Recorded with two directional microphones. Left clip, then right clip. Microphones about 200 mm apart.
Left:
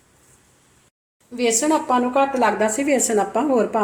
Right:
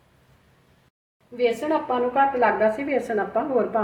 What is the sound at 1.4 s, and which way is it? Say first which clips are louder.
A woman's voice: left 3 dB; 50° left (ahead or behind).